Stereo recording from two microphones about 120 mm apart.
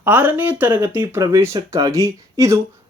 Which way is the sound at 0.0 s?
15° right (ahead or behind).